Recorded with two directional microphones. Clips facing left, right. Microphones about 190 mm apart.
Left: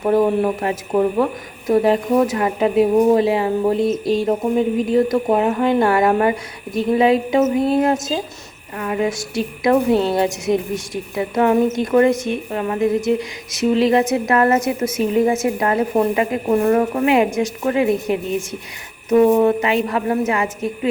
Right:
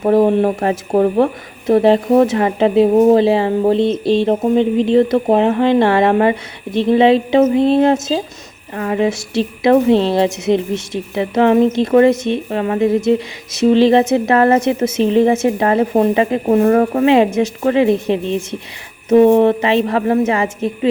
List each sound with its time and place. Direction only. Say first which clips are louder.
0.0 s a woman's voice: right 4 dB; 25° right (ahead or behind)